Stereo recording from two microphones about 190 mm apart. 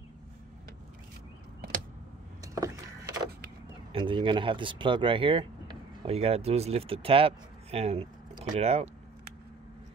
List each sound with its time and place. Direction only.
2.4 s vehicle: 15° right (ahead or behind)
3.9 s speech: 25° right (ahead or behind)